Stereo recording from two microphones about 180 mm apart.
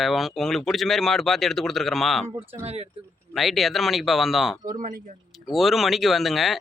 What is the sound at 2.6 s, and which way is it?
Speech, 35° right (ahead or behind).